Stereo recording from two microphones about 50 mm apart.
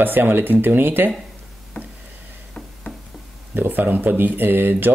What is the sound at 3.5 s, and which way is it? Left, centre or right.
Speech, right.